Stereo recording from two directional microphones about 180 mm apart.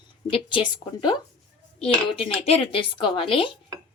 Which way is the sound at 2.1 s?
30° left (ahead or behind).